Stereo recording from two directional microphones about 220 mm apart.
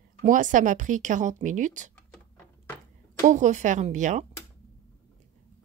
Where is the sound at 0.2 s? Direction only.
35° right (ahead or behind).